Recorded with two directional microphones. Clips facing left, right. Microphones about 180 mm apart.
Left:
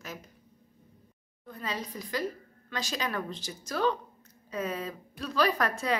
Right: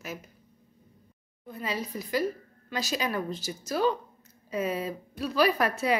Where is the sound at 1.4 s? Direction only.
10° right (ahead or behind).